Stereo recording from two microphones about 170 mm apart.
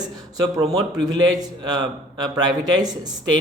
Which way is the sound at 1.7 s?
25° right (ahead or behind).